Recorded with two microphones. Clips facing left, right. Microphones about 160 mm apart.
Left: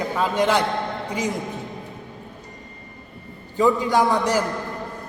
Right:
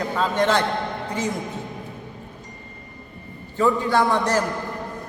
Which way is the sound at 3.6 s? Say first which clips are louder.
Left 1 dB; 15° left (ahead or behind).